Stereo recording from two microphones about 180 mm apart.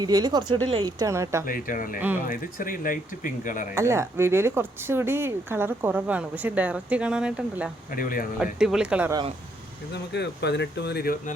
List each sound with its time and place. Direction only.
0.0 s speech: 20° right (ahead or behind)
1.5 s speech: 50° left (ahead or behind)
2.0 s speech: 10° right (ahead or behind)
2.2 s speech: 50° left (ahead or behind)
3.8 s speech: 15° right (ahead or behind)
7.9 s speech: 50° left (ahead or behind)
8.5 s speech: 5° right (ahead or behind)
9.9 s speech: 70° left (ahead or behind)